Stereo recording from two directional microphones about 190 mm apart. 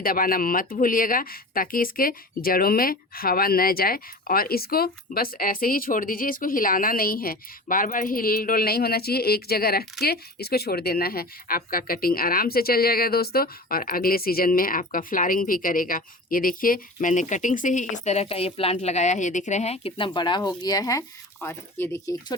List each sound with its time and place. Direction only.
0.0 s speech: 50° left (ahead or behind); by 22.4 s 15° left (ahead or behind)